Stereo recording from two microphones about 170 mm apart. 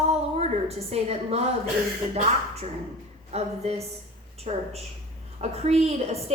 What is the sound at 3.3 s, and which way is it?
A woman's voice, 40° right (ahead or behind).